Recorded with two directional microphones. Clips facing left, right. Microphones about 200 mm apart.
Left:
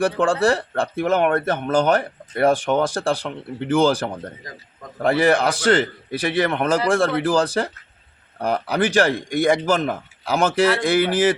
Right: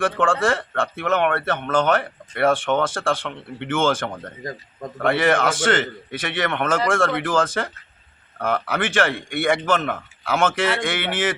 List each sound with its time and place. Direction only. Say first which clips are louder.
0.0 s speech: left 2 dB; 40° left (ahead or behind)